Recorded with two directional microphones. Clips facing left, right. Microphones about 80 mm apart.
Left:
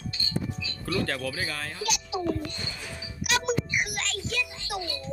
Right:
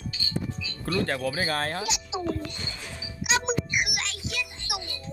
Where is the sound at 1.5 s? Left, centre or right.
Right.